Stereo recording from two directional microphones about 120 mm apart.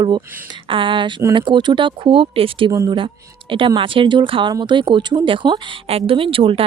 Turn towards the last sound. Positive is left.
turn(degrees=-50)  # may be behind; listen again after turning